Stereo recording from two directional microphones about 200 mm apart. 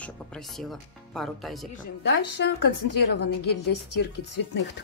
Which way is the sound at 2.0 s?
60° left (ahead or behind).